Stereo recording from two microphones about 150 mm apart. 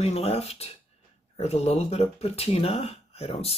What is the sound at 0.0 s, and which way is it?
Speech, 40° left (ahead or behind).